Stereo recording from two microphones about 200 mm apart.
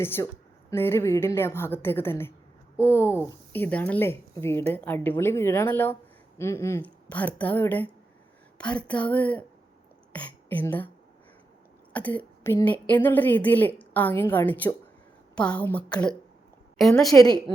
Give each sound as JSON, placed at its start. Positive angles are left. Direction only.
{"t": 0.0, "sound": "speech", "side_deg": 10}
{"t": 11.9, "sound": "a woman's voice", "side_deg": 10}
{"t": 17.2, "sound": "speech", "side_deg": 20}